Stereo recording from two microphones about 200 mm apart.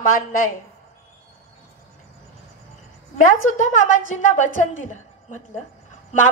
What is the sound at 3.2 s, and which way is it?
A woman's voice, 40° left (ahead or behind).